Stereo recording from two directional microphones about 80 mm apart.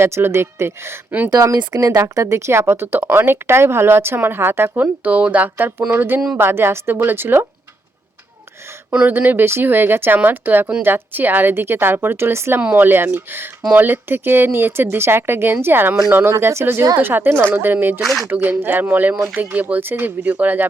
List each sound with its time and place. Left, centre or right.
0.0 s speech: right
1.3 s speech: right
2.1 s speech: right; by 5.5 s centre
5.5 s speech: right
8.9 s speech: centre
18.0 s speech: centre
18.3 s speech: right